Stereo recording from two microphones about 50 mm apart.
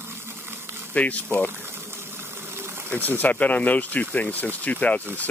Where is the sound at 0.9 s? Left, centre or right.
Left.